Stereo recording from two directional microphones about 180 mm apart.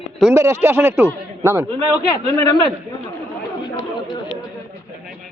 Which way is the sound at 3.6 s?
25° left (ahead or behind).